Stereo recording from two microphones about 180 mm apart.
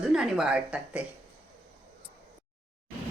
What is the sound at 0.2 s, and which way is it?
Speech, 5° right (ahead or behind).